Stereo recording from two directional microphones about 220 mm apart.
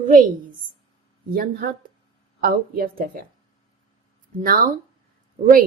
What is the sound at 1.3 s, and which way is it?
A woman's voice, 40° right (ahead or behind).